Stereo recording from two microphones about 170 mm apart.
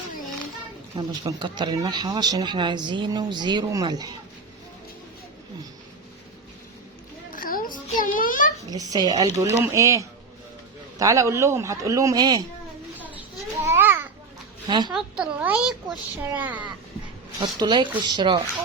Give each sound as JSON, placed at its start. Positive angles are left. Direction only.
{"t": 0.9, "sound": "speech", "side_deg": -25}
{"t": 7.3, "sound": "a sound", "side_deg": 55}
{"t": 8.7, "sound": "speech", "side_deg": -20}
{"t": 13.0, "sound": "babbling", "side_deg": -15}
{"t": 14.7, "sound": "speech", "side_deg": -25}
{"t": 14.9, "sound": "speech", "side_deg": -5}
{"t": 17.4, "sound": "speech", "side_deg": -25}